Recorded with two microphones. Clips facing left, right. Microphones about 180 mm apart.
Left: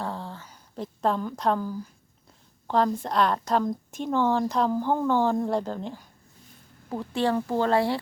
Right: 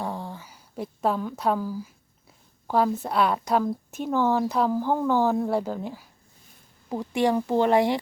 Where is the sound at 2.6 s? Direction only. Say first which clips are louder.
Right 1 dB; 5° right (ahead or behind).